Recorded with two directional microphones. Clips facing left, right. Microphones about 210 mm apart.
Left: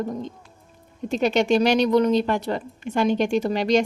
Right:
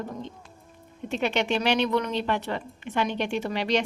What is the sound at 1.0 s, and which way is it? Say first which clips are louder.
A woman's voice: left 6 dB; 40° left (ahead or behind).